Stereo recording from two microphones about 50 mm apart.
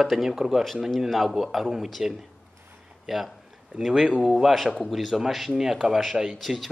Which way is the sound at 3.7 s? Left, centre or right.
Centre.